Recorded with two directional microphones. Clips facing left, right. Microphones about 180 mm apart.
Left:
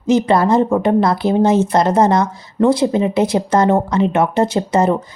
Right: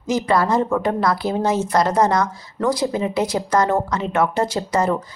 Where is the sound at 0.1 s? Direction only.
25° left (ahead or behind).